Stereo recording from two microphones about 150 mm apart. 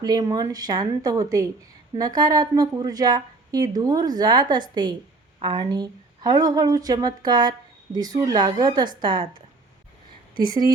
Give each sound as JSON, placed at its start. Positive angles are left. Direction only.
{"t": 0.0, "sound": "a woman's voice", "side_deg": -25}
{"t": 10.4, "sound": "a woman's voice", "side_deg": -25}